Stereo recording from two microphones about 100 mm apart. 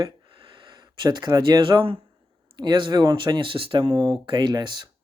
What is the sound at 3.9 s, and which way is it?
Speech, 40° right (ahead or behind).